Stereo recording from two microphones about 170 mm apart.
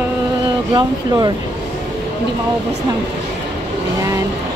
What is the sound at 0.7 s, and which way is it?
Speech, 25° right (ahead or behind).